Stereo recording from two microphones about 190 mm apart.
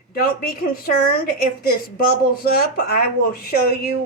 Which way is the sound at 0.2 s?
50° left (ahead or behind).